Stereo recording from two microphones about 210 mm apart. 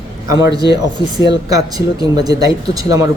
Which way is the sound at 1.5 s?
15° right (ahead or behind).